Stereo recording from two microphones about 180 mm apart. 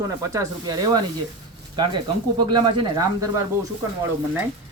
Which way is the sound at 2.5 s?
25° right (ahead or behind).